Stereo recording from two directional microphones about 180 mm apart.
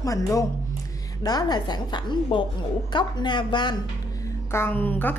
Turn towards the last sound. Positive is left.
turn(degrees=10)  # may be behind; listen again after turning